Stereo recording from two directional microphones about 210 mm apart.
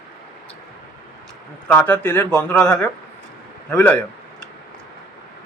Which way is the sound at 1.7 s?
10° left (ahead or behind).